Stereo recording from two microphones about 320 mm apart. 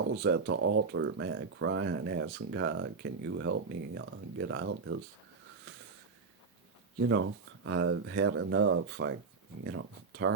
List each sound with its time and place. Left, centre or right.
0.1 s speech: right
7.1 s speech: right